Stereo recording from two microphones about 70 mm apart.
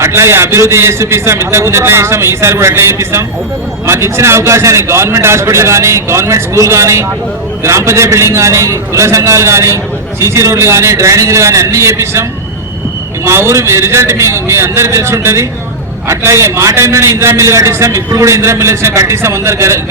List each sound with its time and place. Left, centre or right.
0.0 s a man's voice: right
13.2 s a man's voice: right